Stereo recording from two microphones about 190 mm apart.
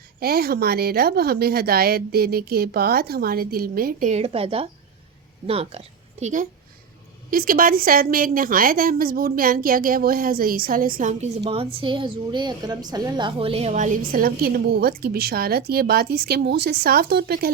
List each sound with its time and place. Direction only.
0.2 s a woman's voice: 55° right (ahead or behind)
4.1 s a woman's voice: 30° right (ahead or behind); by 17.5 s 55° right (ahead or behind)